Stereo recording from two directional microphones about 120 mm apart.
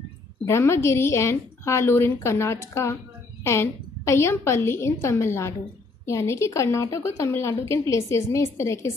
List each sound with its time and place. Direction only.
0.5 s a woman's voice: 20° left (ahead or behind)